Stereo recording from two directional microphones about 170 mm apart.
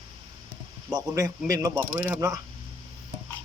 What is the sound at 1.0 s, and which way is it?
Speech, 20° right (ahead or behind).